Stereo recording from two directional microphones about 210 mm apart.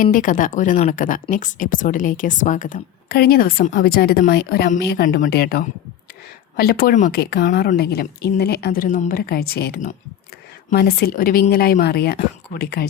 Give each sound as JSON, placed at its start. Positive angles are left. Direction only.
{"t": 0.0, "sound": "a woman's voice", "side_deg": 40}